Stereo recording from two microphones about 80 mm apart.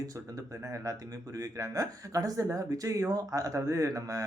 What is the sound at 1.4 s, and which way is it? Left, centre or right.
Speech, right.